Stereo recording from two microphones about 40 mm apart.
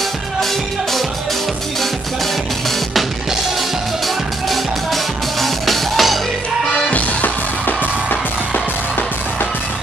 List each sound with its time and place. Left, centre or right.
4.5 s music: centre
6.9 s music: left